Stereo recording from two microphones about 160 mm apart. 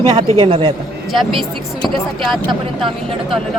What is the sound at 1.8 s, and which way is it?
Speech, centre (ahead or behind).